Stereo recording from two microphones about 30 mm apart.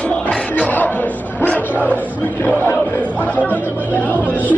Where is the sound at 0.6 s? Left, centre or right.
Left.